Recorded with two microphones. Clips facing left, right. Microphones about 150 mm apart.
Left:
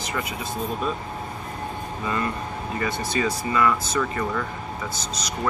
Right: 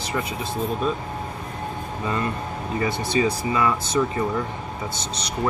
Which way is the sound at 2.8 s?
25° right (ahead or behind).